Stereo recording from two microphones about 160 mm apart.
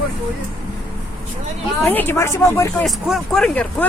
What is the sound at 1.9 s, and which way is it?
Speech, 10° left (ahead or behind).